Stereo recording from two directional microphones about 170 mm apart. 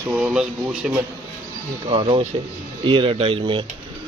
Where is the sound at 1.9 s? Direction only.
30° right (ahead or behind).